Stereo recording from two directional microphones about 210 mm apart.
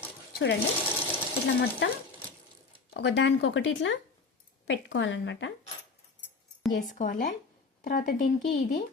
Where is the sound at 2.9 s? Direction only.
55° left (ahead or behind).